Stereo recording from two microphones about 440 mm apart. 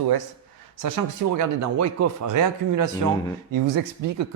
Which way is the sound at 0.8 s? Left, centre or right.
Right.